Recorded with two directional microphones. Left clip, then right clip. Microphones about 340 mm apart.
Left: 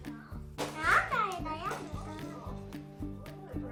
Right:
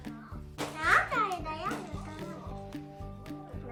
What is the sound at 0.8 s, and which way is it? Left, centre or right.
Music, centre.